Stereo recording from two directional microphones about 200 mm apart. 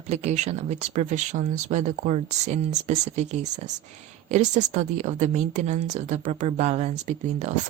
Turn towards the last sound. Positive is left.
turn(degrees=-35)  # may be behind; listen again after turning